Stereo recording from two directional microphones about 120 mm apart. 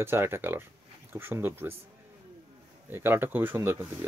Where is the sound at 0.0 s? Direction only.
20° right (ahead or behind).